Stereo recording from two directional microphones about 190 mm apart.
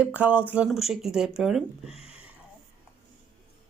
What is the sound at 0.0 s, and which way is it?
Speech, 10° right (ahead or behind).